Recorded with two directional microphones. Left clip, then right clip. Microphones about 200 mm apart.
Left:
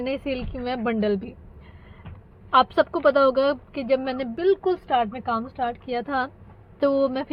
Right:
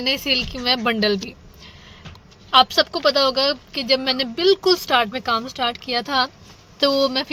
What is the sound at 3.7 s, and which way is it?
A woman's voice, 15° right (ahead or behind).